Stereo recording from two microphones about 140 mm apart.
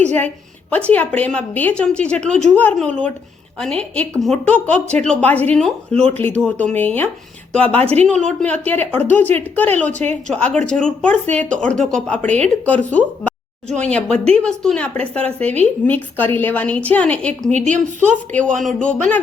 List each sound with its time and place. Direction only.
0.7 s a woman's voice: 10° left (ahead or behind)
17.7 s a woman's voice: 60° right (ahead or behind)
18.3 s a woman's voice: 5° left (ahead or behind)